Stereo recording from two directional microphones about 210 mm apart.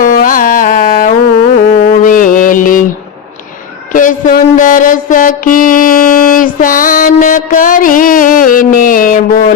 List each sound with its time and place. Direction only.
0.0 s carnatic music: 40° left (ahead or behind)
1.5 s mantra: 40° left (ahead or behind)
3.9 s mantra: 40° left (ahead or behind)